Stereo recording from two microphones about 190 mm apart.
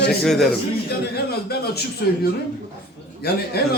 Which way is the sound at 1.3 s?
55° left (ahead or behind).